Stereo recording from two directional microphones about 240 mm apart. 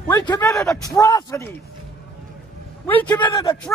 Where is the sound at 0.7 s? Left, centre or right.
Centre.